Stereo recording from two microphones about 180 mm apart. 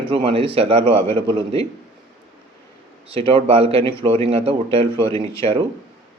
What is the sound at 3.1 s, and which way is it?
Speech, 30° right (ahead or behind).